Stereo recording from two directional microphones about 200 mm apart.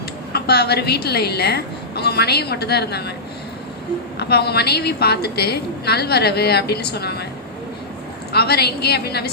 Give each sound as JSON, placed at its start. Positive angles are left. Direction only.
{"t": 0.3, "sound": "a woman's voice", "side_deg": 55}
{"t": 4.2, "sound": "a woman's voice", "side_deg": 55}
{"t": 8.3, "sound": "a woman's voice", "side_deg": 55}